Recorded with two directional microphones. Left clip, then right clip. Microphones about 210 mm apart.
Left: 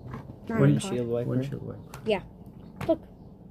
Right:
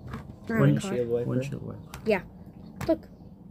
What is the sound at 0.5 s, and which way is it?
Speech, 10° right (ahead or behind).